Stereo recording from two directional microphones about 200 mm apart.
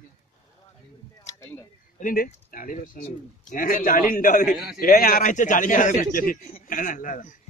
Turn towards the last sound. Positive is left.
turn(degrees=40)  # may be behind; listen again after turning